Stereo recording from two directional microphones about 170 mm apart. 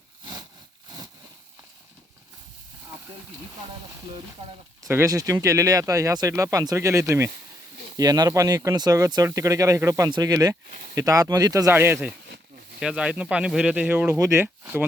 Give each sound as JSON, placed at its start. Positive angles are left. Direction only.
{"t": 4.8, "sound": "speech", "side_deg": -15}